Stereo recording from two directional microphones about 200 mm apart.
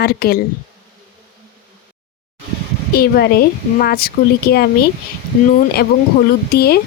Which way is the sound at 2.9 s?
50° left (ahead or behind).